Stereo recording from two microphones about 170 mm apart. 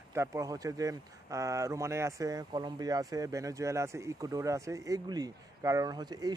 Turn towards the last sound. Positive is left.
turn(degrees=-25)  # may be behind; listen again after turning